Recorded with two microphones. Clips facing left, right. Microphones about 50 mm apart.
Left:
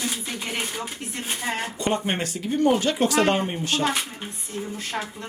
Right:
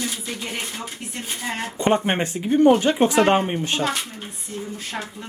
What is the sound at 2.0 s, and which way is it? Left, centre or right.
Speech, right.